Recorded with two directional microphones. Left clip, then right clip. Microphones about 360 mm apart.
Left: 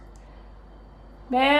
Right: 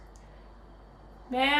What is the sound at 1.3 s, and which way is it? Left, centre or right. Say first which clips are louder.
Speech: left 6 dB; centre.